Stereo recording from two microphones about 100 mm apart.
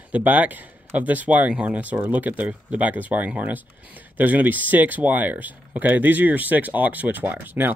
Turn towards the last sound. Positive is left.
turn(degrees=-15)  # may be behind; listen again after turning